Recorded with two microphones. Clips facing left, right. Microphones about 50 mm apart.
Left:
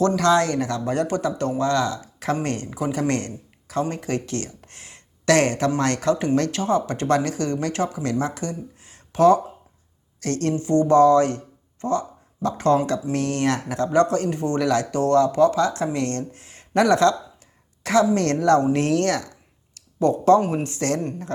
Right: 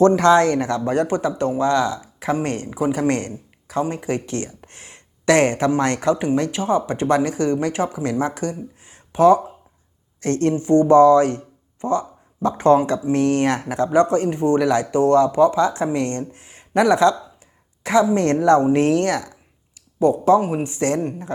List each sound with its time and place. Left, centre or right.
0.0 s speech: right